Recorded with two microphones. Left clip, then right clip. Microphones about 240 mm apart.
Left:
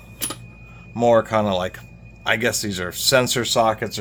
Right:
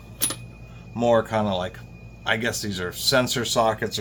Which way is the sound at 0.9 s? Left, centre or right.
Left.